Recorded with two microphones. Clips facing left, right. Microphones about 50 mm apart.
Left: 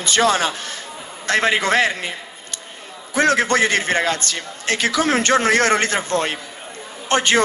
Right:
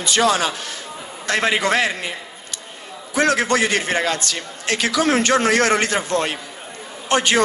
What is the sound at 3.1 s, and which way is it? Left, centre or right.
A man's voice, left.